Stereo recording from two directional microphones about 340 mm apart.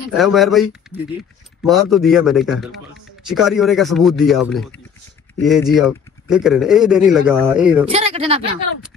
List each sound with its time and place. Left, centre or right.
0.1 s speech: centre
7.8 s speech: centre